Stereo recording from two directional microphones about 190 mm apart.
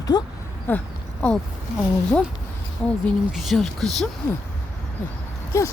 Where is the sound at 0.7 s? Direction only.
10° left (ahead or behind).